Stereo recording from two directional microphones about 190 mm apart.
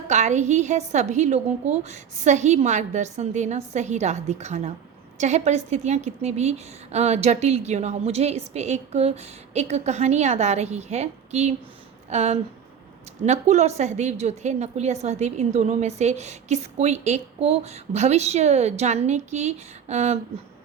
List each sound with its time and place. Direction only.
0.1 s a woman's voice: 35° right (ahead or behind)